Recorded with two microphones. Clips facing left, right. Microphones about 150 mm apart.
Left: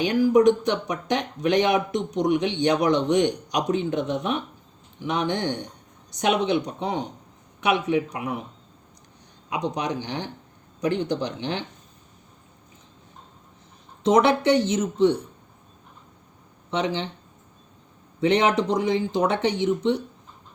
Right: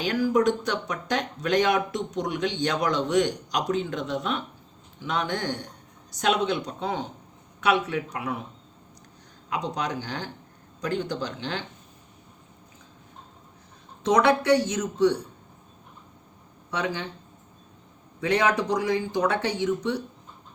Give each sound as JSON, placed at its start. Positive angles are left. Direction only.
{"t": 0.0, "sound": "a man's voice", "side_deg": 20}
{"t": 9.7, "sound": "speech", "side_deg": 20}
{"t": 14.0, "sound": "speech", "side_deg": 25}
{"t": 16.7, "sound": "speech", "side_deg": 25}
{"t": 18.2, "sound": "speech", "side_deg": 25}